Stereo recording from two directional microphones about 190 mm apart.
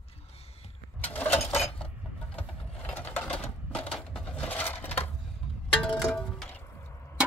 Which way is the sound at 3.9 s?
5° left (ahead or behind).